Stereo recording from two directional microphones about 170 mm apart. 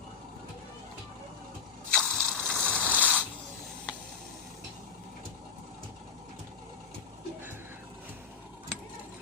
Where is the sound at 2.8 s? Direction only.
10° right (ahead or behind).